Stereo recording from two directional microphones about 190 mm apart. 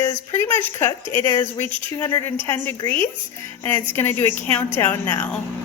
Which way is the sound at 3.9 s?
10° left (ahead or behind).